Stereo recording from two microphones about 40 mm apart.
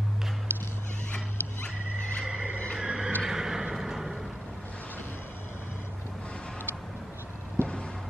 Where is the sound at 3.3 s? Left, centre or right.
Centre.